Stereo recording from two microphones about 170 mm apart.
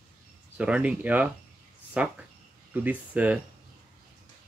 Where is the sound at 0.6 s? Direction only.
5° right (ahead or behind).